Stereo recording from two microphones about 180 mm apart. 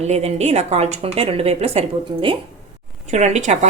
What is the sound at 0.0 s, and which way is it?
Speech, 35° right (ahead or behind).